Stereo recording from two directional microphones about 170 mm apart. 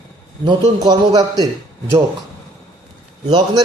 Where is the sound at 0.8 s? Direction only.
20° right (ahead or behind).